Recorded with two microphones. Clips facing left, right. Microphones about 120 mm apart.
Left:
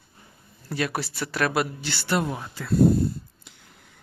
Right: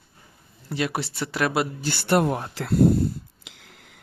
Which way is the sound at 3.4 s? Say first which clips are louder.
Right 3 dB; 90° right.